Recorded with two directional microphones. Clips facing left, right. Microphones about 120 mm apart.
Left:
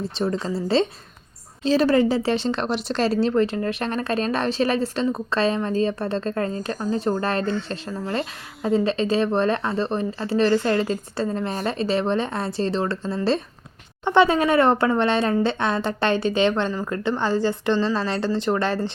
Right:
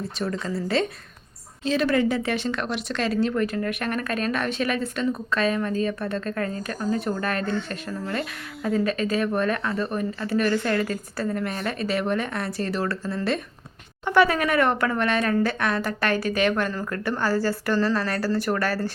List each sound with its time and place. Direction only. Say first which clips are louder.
0.0 s speech: left 4 dB; 25° left (ahead or behind)